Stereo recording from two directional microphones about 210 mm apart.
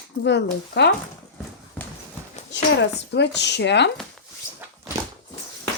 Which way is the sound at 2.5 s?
55° left (ahead or behind).